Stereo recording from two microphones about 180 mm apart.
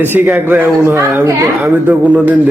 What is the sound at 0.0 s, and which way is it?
A woman's voice, 10° right (ahead or behind).